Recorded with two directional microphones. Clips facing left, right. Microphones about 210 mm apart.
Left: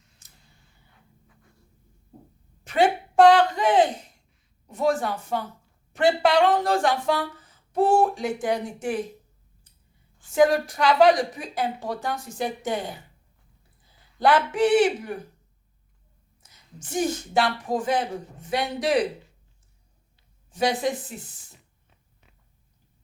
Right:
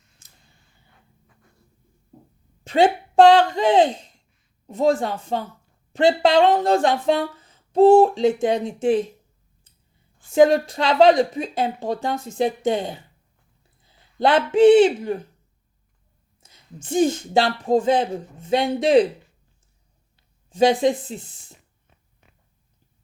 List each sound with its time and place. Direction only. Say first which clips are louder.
2.6 s speech: right 4 dB; 25° right (ahead or behind)
10.3 s speech: right 4 dB; 25° right (ahead or behind)
14.2 s speech: right 5 dB; 25° right (ahead or behind)
16.4 s speech: right 5 dB; 25° right (ahead or behind)
20.5 s speech: right 7 dB; 25° right (ahead or behind)